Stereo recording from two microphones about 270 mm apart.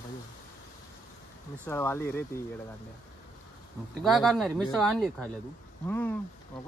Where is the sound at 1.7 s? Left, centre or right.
Centre.